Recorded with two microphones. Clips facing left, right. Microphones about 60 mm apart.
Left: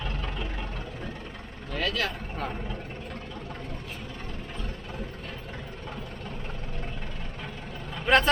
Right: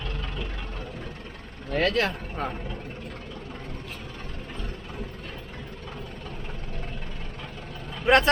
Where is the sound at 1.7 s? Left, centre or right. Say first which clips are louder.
Right 5 dB; right.